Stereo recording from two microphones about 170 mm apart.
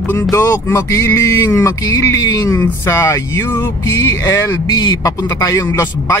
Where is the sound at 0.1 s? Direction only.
20° left (ahead or behind).